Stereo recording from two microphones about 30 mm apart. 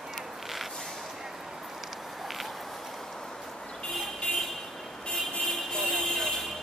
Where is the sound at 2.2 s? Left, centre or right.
Centre.